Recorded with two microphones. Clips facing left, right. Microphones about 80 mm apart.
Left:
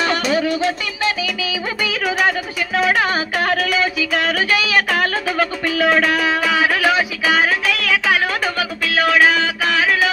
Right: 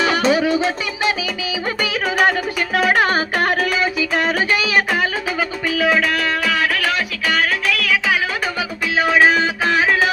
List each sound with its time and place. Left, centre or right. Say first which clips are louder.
0.3 s music: right 2 dB; centre
0.7 s music: even; right
1.8 s a sound: right 1 dB; right
5.8 s music: left 2 dB; centre
8.5 s music: left 1 dB; right